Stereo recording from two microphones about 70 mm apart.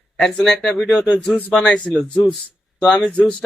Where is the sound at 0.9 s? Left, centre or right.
Centre.